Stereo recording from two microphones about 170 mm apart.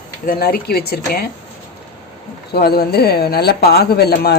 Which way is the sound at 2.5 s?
65° left (ahead or behind).